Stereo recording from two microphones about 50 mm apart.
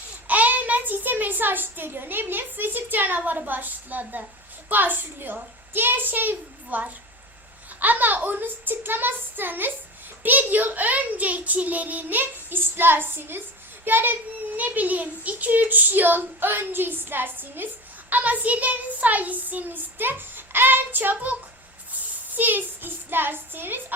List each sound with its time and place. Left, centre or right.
0.3 s a child's voice: right